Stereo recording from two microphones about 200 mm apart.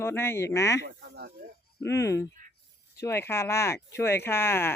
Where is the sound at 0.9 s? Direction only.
55° right (ahead or behind).